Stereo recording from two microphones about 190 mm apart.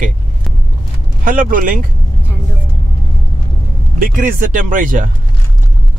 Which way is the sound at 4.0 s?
45° right (ahead or behind).